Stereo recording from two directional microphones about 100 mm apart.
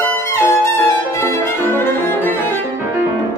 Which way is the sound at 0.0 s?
25° left (ahead or behind).